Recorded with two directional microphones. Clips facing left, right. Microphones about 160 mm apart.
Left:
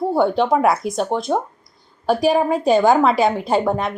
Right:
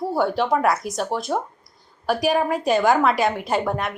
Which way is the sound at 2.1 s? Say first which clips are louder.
Left 4 dB; 25° left (ahead or behind).